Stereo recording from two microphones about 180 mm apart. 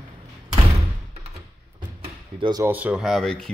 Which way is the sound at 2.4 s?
20° right (ahead or behind).